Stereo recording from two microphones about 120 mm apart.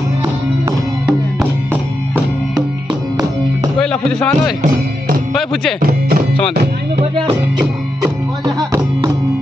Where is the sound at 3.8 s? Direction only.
5° left (ahead or behind).